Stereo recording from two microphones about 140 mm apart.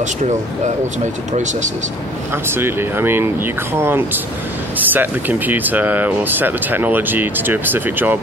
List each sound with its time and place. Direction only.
0.0 s speech: 55° right (ahead or behind)
2.4 s speech: 15° right (ahead or behind)